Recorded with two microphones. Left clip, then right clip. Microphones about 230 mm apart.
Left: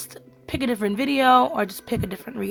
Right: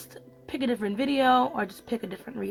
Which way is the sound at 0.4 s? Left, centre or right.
Left.